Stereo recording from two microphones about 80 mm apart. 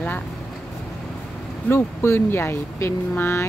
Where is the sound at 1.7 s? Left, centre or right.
Left.